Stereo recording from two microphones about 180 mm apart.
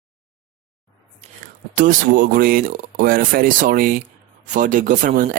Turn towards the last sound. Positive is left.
turn(degrees=-45)  # may be behind; listen again after turning